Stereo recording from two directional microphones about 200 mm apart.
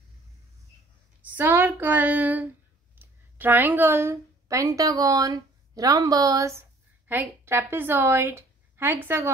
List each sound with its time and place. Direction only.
1.2 s speech: 10° right (ahead or behind)